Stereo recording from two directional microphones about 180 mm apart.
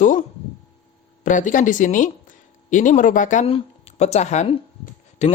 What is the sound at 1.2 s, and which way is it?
Speech, 45° left (ahead or behind).